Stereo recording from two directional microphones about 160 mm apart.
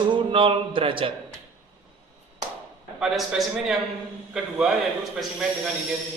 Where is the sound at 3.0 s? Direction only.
5° right (ahead or behind).